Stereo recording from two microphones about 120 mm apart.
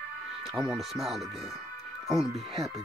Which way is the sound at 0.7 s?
Centre (ahead or behind).